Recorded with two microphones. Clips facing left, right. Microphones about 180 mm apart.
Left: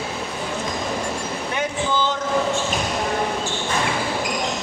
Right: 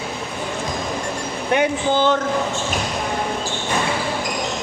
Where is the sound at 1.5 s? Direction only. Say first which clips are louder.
Right 6 dB; 60° right (ahead or behind).